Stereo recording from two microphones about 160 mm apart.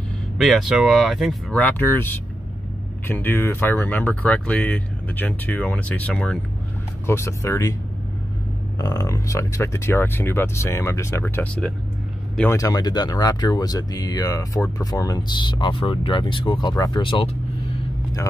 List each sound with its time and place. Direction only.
0.4 s speech: centre (ahead or behind)
1.6 s speech: 10° left (ahead or behind)
7.1 s speech: 15° left (ahead or behind)
8.7 s speech: 25° left (ahead or behind)
12.5 s speech: 20° left (ahead or behind)